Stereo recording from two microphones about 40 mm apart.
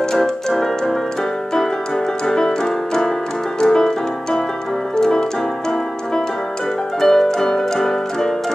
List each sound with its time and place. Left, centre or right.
0.1 s keyboard: centre
2.2 s music: centre
4.9 s keyboard: centre
7.0 s piano: centre